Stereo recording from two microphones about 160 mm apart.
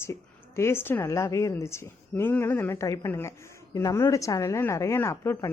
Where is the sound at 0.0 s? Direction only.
15° left (ahead or behind).